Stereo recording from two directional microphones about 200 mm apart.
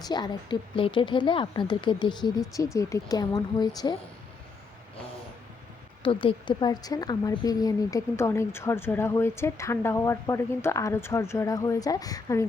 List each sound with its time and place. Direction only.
0.0 s speech: 20° left (ahead or behind)
6.0 s a woman's voice: 25° left (ahead or behind)